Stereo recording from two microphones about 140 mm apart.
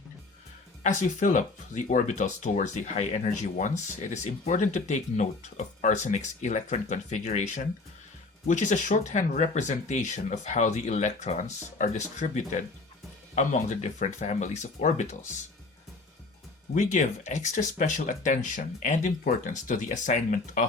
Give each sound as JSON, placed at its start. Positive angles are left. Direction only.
{"t": 0.8, "sound": "speech", "side_deg": 65}
{"t": 16.7, "sound": "speech", "side_deg": 60}